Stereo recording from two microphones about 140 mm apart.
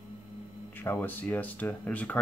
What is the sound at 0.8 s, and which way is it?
Speech, 15° left (ahead or behind).